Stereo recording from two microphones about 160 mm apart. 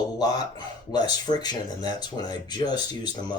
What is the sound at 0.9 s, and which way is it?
Speech, 25° left (ahead or behind).